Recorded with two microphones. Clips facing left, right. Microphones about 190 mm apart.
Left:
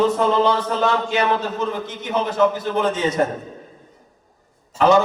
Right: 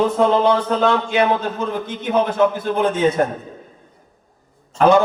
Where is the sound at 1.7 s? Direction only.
55° right (ahead or behind).